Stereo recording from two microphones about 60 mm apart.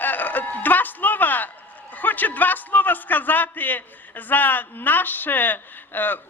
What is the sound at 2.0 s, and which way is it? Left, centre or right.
A man's voice, left.